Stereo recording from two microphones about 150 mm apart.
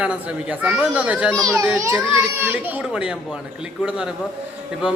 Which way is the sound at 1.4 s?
20° right (ahead or behind).